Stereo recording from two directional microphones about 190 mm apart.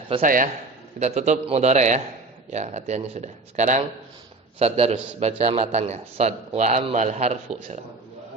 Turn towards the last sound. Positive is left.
turn(degrees=-40)  # may be behind; listen again after turning